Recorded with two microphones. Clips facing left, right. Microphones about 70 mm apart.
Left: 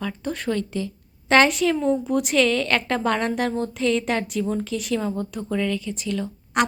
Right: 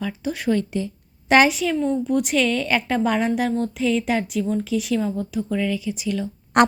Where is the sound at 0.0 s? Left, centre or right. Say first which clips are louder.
Right 2 dB; centre.